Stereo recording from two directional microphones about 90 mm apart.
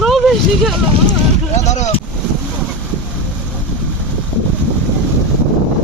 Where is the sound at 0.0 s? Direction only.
Centre (ahead or behind).